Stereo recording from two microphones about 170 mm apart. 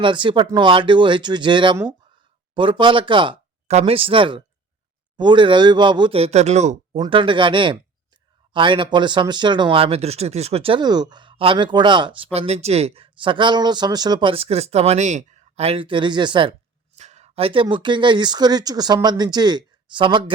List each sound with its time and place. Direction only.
0.0 s speech: 30° right (ahead or behind)
7.0 s speech: 30° right (ahead or behind)
17.0 s speech: 40° right (ahead or behind)